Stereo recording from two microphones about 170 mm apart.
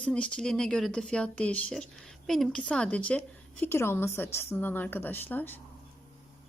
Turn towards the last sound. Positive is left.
turn(degrees=10)  # may be behind; listen again after turning